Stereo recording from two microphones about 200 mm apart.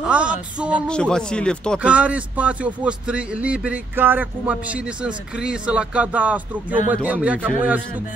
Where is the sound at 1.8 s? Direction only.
5° right (ahead or behind).